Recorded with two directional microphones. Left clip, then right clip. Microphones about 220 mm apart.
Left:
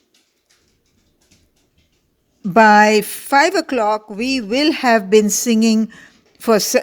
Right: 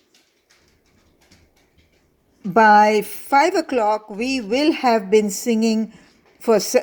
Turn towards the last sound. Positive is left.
turn(degrees=45)  # may be behind; listen again after turning